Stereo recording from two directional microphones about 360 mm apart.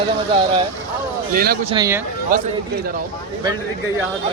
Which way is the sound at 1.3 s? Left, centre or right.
Right.